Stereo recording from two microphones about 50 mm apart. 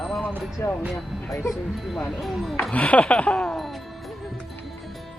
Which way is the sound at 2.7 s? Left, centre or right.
Left.